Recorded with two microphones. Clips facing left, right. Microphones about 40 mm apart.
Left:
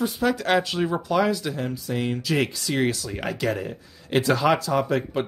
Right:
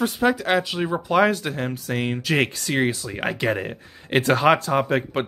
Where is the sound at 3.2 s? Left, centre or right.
Right.